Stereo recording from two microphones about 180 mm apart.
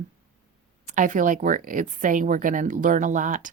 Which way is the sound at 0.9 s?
45° right (ahead or behind).